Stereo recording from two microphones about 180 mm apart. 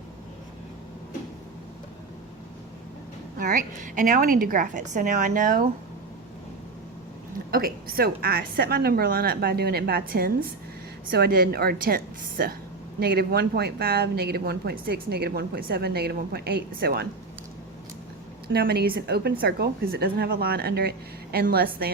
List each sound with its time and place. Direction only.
3.3 s a woman's voice: 50° right (ahead or behind)
7.5 s speech: 55° right (ahead or behind)
18.4 s speech: 60° right (ahead or behind)